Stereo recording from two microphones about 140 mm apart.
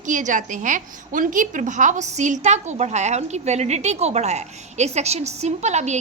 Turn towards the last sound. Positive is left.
turn(degrees=-55)  # may be behind; listen again after turning